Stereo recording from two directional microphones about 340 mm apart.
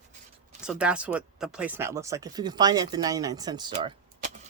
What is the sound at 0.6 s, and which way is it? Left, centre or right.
Speech, centre.